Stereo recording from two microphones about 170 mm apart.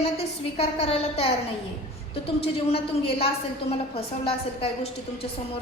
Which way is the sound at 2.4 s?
35° left (ahead or behind).